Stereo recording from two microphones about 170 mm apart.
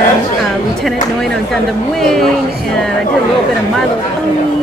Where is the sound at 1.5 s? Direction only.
Centre (ahead or behind).